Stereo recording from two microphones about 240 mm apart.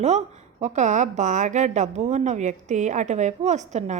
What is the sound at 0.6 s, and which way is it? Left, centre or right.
A woman's voice, right.